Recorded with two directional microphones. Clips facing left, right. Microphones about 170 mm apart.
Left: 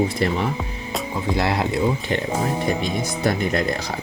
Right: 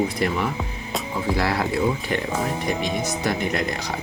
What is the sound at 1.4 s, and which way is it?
Speech, 25° left (ahead or behind).